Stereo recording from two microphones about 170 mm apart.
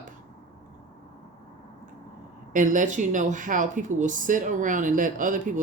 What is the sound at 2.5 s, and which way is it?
Speech, 50° right (ahead or behind).